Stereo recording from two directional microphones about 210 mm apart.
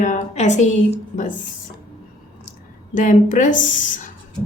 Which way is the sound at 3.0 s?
40° left (ahead or behind).